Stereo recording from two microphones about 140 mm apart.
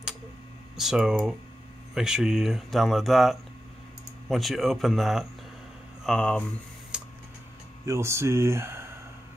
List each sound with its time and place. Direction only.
0.7 s speech: 5° right (ahead or behind)
6.9 s a sound: 5° right (ahead or behind)
7.8 s speech: 20° right (ahead or behind)